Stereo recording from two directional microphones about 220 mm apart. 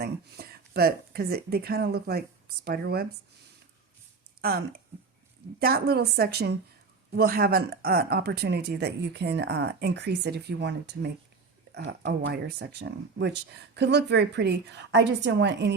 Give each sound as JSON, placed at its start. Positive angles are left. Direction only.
{"t": 0.0, "sound": "speech", "side_deg": -45}
{"t": 4.4, "sound": "a sound", "side_deg": -45}
{"t": 5.5, "sound": "speech", "side_deg": -45}